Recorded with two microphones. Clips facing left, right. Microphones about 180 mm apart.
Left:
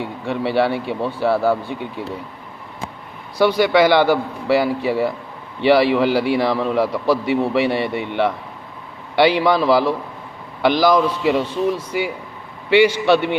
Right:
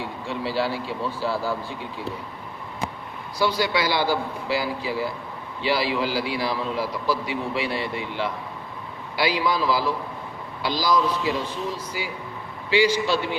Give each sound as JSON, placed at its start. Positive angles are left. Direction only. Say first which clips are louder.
{"t": 0.0, "sound": "speech", "louder": "left 6 dB", "side_deg": 60}
{"t": 3.3, "sound": "a man's voice", "louder": "left 9 dB", "side_deg": 65}